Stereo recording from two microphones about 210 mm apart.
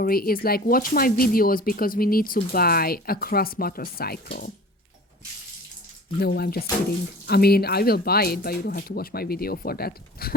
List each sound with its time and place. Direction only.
0.0 s speech: 45° left (ahead or behind)
6.1 s speech: 50° left (ahead or behind)